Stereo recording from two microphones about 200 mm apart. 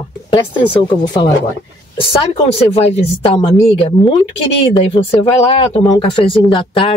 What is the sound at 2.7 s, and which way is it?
Speech, 30° left (ahead or behind).